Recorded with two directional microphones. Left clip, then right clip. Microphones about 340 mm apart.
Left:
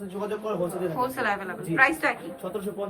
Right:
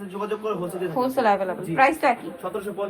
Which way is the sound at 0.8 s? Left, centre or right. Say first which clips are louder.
Right 4 dB; centre.